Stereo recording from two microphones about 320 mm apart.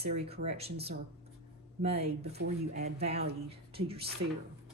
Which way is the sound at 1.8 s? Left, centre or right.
Centre.